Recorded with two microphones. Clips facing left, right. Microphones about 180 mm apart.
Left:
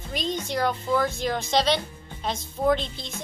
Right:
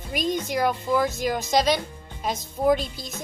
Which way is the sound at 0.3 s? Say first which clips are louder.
Right 2 dB; 10° right (ahead or behind).